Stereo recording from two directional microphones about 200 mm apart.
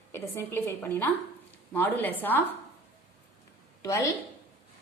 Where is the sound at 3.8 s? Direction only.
15° left (ahead or behind).